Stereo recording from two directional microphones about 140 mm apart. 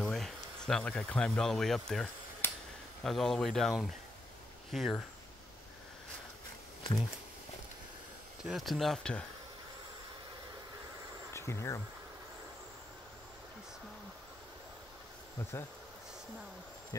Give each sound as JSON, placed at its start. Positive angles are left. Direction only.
{"t": 0.0, "sound": "speech", "side_deg": 0}
{"t": 2.4, "sound": "a sound", "side_deg": 15}
{"t": 3.0, "sound": "speech", "side_deg": 5}
{"t": 8.5, "sound": "speech", "side_deg": 0}
{"t": 11.3, "sound": "speech", "side_deg": 20}